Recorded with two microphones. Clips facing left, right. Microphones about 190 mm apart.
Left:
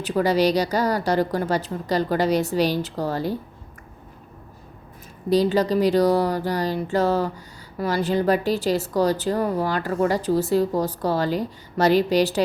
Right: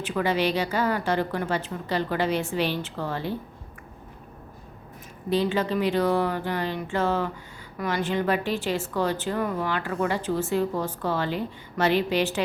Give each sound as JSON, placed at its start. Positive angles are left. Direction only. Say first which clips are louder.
{"t": 0.0, "sound": "speech", "louder": "left 5 dB", "side_deg": 35}
{"t": 5.3, "sound": "speech", "louder": "left 5 dB", "side_deg": 40}